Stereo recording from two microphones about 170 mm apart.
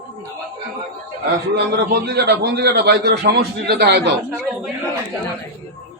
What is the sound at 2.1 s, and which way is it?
A man's voice, 75° right (ahead or behind).